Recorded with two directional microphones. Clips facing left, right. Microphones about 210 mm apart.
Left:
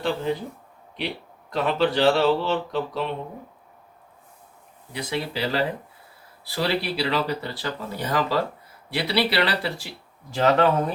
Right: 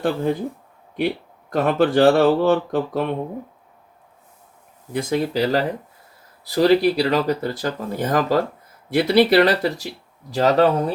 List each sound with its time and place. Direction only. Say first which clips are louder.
0.0 s speech: right 4 dB; 50° right (ahead or behind)
4.9 s speech: right 7 dB; 45° right (ahead or behind)